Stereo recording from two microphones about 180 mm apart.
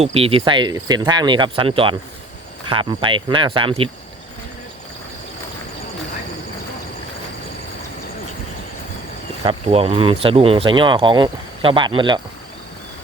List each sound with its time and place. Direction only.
0.0 s speech: 35° right (ahead or behind)
9.4 s speech: 30° right (ahead or behind)